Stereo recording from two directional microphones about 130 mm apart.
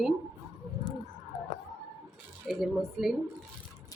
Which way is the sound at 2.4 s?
Centre (ahead or behind).